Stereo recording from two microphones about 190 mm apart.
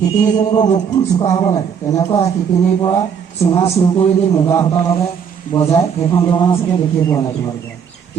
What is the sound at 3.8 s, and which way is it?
A man's voice, 25° left (ahead or behind).